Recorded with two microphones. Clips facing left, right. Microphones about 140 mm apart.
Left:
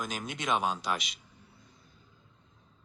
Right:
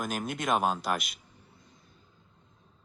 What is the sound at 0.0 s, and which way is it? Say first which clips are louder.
Speech: right 4 dB; 50° right (ahead or behind).